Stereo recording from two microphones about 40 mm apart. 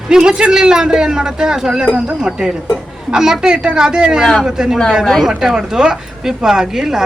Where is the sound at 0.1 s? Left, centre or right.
Centre.